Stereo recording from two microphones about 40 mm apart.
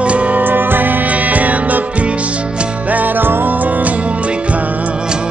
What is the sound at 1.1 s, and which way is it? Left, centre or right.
Music, right.